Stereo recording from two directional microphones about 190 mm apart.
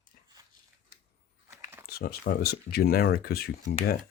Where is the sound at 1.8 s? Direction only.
55° left (ahead or behind).